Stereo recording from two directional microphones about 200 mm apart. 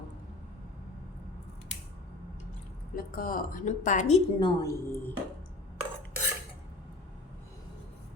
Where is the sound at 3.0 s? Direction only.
45° left (ahead or behind).